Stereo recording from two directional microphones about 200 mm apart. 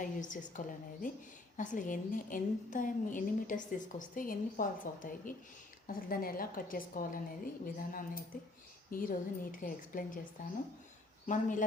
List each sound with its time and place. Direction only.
0.0 s a woman's voice: 40° left (ahead or behind)
11.3 s a woman's voice: 40° left (ahead or behind)